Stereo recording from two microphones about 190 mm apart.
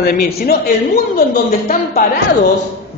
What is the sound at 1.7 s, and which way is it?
Speech, 50° left (ahead or behind).